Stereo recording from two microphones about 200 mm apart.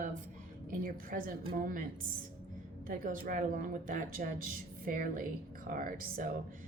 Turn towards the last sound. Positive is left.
turn(degrees=-45)  # may be behind; listen again after turning